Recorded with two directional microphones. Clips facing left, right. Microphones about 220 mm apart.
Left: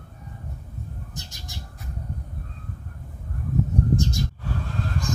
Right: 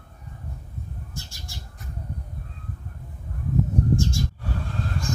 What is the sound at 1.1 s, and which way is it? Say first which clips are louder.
Bird: even; 20° left (ahead or behind).